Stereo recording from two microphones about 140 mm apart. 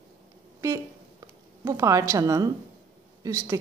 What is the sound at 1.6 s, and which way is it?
A woman's voice, 20° right (ahead or behind).